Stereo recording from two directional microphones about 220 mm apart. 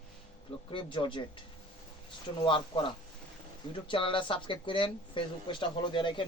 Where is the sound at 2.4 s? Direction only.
20° left (ahead or behind).